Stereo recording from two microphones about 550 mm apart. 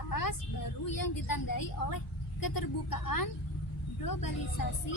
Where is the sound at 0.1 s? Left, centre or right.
Left.